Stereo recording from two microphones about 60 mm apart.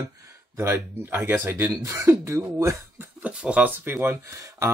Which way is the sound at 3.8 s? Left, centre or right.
Right.